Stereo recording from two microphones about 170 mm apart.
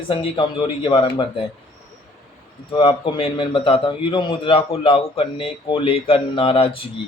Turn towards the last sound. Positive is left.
turn(degrees=30)  # may be behind; listen again after turning